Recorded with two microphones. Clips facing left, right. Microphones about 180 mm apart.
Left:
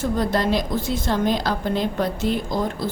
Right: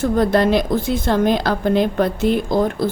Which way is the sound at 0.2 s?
60° right (ahead or behind).